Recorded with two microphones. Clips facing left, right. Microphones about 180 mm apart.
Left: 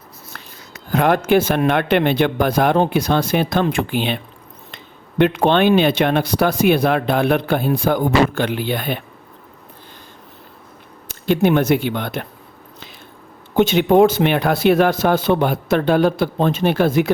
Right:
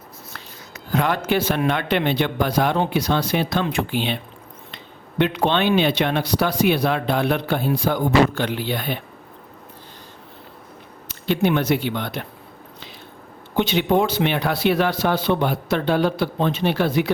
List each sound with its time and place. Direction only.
0.9 s speech: 50° left (ahead or behind)
11.1 s speech: 50° left (ahead or behind)
13.6 s speech: 50° left (ahead or behind)